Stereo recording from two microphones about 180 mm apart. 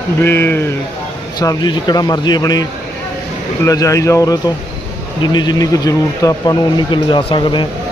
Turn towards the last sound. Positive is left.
turn(degrees=25)  # may be behind; listen again after turning